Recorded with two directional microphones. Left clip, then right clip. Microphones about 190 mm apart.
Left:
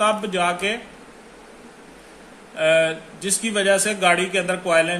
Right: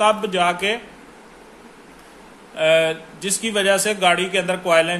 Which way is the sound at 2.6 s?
25° right (ahead or behind).